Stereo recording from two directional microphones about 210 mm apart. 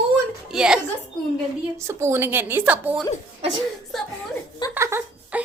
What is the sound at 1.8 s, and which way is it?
A woman's voice, 15° right (ahead or behind).